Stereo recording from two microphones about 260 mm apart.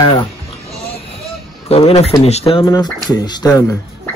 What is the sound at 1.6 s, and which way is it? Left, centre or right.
Speech, left.